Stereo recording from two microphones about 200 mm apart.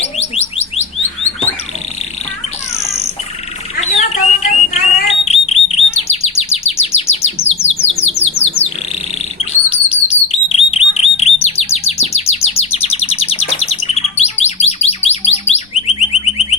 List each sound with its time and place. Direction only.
0.0 s a sound: 30° left (ahead or behind)
3.8 s alarm: 35° left (ahead or behind)
5.6 s chirp: 30° left (ahead or behind)
7.9 s bird: 35° left (ahead or behind)
10.7 s chirp: 30° left (ahead or behind)